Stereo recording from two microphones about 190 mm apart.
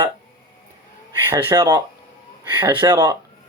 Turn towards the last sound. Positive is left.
turn(degrees=-20)  # may be behind; listen again after turning